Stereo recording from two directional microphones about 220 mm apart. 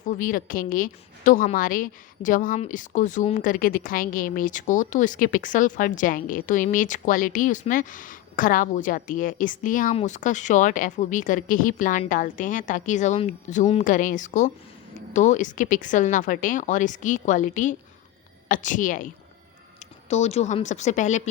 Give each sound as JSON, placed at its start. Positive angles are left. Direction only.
{"t": 0.0, "sound": "a woman's voice", "side_deg": 35}